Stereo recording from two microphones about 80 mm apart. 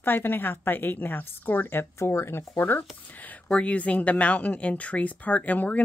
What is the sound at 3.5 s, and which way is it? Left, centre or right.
Speech, centre.